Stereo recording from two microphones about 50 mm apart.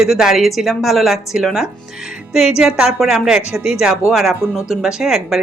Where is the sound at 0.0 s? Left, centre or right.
Centre.